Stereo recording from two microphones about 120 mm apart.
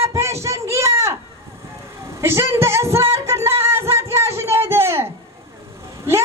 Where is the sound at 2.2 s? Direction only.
20° right (ahead or behind).